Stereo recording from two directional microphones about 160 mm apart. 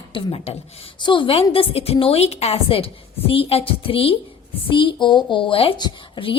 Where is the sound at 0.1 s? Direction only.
35° left (ahead or behind).